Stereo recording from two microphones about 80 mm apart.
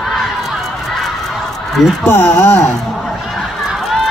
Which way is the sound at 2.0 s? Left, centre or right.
Left.